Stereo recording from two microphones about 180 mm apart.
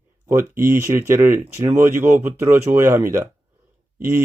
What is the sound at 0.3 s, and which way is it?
Speech, 15° right (ahead or behind).